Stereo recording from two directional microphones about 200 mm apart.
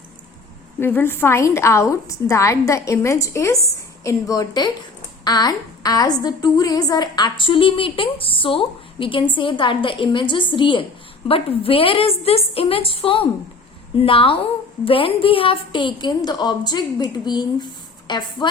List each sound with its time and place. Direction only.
0.8 s a woman's voice: 10° left (ahead or behind)